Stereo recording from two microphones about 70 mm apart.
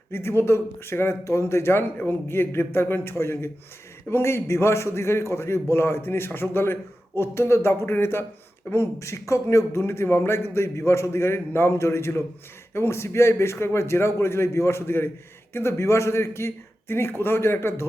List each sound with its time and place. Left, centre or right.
0.1 s a man's voice: left